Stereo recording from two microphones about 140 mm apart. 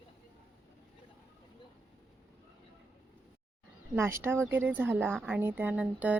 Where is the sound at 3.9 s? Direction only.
15° right (ahead or behind).